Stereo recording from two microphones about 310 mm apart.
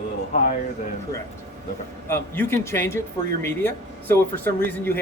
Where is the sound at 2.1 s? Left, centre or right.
Centre.